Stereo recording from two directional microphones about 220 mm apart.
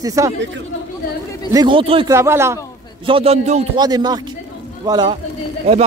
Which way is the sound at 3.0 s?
25° right (ahead or behind).